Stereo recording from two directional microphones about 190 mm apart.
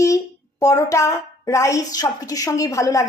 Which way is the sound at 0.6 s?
15° left (ahead or behind).